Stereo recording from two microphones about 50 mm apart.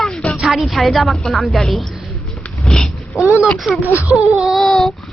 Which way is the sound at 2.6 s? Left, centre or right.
Centre.